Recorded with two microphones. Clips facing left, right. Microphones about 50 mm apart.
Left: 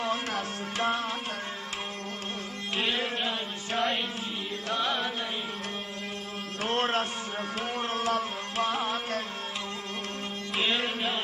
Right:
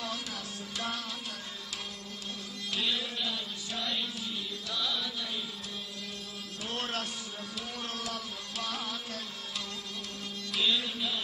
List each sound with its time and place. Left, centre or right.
0.0 s music: left
2.7 s music: left
6.6 s a sound: left
7.5 s music: left
10.5 s music: left